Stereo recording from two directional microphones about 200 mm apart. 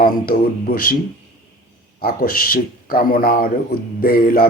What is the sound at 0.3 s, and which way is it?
Speech, 45° left (ahead or behind).